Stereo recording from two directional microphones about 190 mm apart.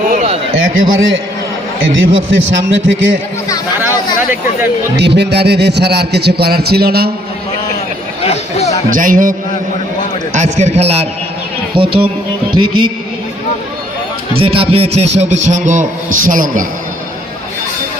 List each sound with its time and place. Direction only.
0.5 s a man's voice: 90° right; by 3.2 s 70° right (ahead or behind)
4.9 s speech: 65° right (ahead or behind)
8.2 s chatter: 35° left (ahead or behind)
8.9 s a man's voice: 45° right (ahead or behind)
10.3 s a man's voice: 40° right (ahead or behind)
12.0 s music: 25° right (ahead or behind)
14.3 s a man's voice: 30° right (ahead or behind); by 16.6 s 45° right (ahead or behind)